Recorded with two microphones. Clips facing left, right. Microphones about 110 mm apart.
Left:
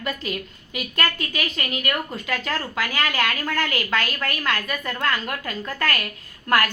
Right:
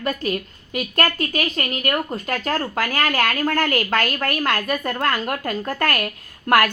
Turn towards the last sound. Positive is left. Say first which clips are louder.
# right 4 dB
turn(degrees=-50)  # may be behind; listen again after turning